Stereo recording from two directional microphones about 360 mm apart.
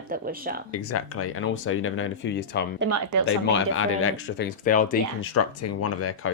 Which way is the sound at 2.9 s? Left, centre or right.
Right.